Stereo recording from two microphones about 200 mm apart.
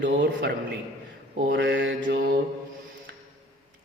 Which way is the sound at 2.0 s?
50° right (ahead or behind).